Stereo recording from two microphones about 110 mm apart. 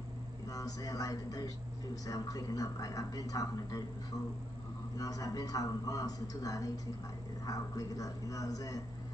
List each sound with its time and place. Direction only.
0.5 s a man's voice: 30° left (ahead or behind)
4.9 s a man's voice: 30° left (ahead or behind)